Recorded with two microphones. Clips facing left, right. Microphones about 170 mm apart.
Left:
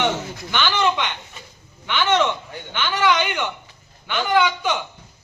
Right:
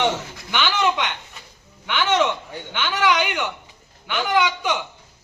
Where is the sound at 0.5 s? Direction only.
5° right (ahead or behind).